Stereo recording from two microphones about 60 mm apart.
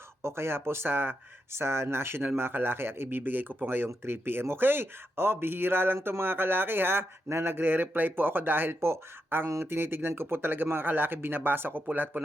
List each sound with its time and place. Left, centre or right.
0.2 s speech: right